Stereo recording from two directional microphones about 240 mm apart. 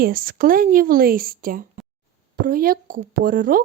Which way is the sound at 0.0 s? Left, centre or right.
Right.